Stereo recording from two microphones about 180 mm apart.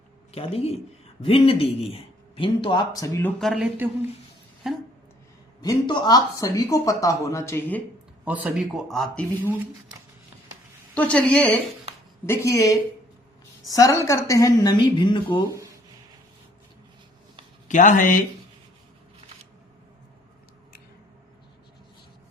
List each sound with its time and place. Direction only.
0.3 s a woman's voice: 35° left (ahead or behind); by 4.8 s 5° right (ahead or behind)
5.6 s speech: 25° left (ahead or behind)
8.2 s speech: 10° right (ahead or behind)
10.9 s a woman's voice: 5° left (ahead or behind); by 15.4 s 25° left (ahead or behind)
17.7 s speech: 45° left (ahead or behind)